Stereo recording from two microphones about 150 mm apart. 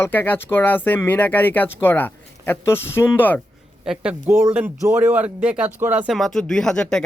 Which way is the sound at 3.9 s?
10° right (ahead or behind).